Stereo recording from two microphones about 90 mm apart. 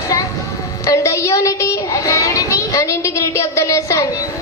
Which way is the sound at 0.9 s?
35° left (ahead or behind).